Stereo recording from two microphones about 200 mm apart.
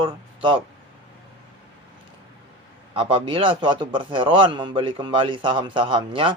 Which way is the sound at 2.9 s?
25° right (ahead or behind).